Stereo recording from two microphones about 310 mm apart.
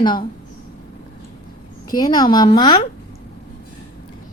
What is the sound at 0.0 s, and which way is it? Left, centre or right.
Speech, centre.